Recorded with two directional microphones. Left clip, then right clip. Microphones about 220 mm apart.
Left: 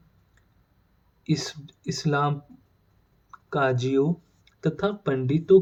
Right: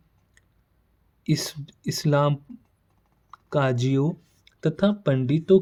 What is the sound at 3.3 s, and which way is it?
Speech, 50° right (ahead or behind).